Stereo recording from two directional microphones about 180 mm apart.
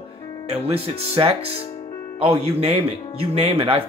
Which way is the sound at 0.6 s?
30° right (ahead or behind).